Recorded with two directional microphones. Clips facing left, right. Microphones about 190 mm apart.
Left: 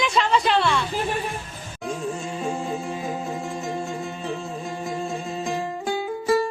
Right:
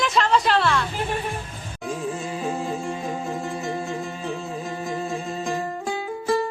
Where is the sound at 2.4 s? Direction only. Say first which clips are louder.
Even; centre (ahead or behind).